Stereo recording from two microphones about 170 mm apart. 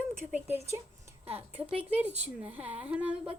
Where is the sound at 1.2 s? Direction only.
35° right (ahead or behind).